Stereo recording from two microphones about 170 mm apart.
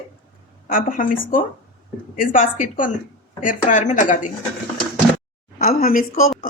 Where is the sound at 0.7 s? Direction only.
55° left (ahead or behind).